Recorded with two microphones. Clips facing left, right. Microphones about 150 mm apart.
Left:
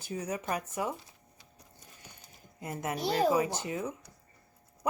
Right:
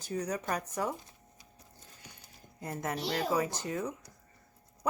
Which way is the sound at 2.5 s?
10° left (ahead or behind).